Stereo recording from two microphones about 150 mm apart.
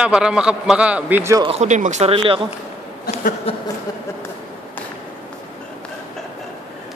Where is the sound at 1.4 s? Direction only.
45° right (ahead or behind).